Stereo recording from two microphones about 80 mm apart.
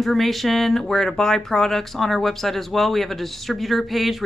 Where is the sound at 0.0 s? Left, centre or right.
Centre.